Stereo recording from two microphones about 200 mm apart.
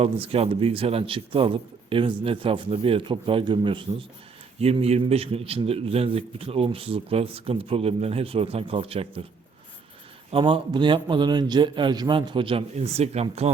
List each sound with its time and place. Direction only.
0.0 s a man's voice: 30° right (ahead or behind)
10.3 s a man's voice: 25° right (ahead or behind)